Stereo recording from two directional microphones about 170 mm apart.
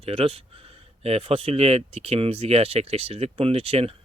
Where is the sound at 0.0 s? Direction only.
35° right (ahead or behind).